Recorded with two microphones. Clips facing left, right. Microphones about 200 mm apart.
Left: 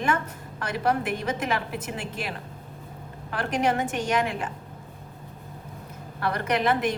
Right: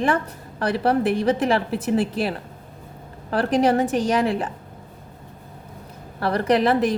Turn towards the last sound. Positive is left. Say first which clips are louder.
# right 6 dB
turn(degrees=-35)  # may be behind; listen again after turning